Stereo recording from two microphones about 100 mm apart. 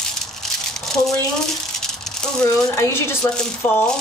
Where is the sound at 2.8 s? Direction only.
25° left (ahead or behind).